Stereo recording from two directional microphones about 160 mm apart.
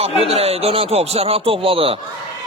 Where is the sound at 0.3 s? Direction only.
40° right (ahead or behind).